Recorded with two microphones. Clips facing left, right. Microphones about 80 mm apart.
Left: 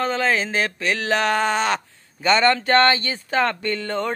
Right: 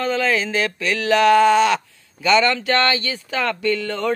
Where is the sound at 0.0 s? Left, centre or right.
Left.